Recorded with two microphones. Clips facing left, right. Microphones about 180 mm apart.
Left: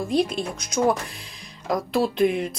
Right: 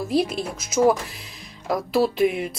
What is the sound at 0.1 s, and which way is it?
Speech, 5° right (ahead or behind).